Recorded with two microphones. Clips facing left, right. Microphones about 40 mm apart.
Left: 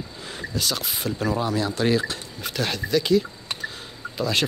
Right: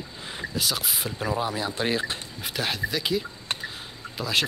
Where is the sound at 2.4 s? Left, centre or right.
Centre.